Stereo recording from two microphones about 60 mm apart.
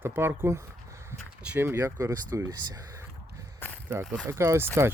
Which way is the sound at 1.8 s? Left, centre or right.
Right.